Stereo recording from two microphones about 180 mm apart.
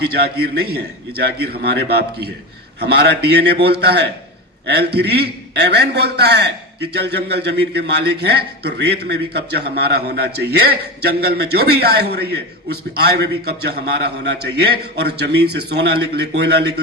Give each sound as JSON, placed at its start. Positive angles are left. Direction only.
{"t": 0.0, "sound": "a man's voice", "side_deg": -60}